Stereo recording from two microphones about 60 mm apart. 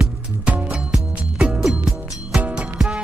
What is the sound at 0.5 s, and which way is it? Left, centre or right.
Music, centre.